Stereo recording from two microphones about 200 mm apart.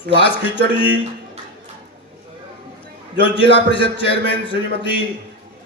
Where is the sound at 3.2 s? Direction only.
25° left (ahead or behind).